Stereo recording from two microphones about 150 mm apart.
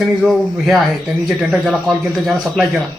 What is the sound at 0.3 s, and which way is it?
A man's voice, centre (ahead or behind).